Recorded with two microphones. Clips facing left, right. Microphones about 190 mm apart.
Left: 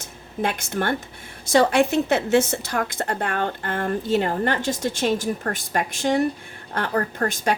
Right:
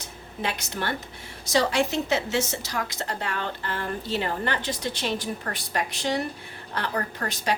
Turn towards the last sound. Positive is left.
turn(degrees=50)  # may be behind; listen again after turning